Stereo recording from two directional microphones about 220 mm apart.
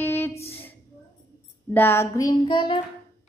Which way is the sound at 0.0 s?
10° left (ahead or behind).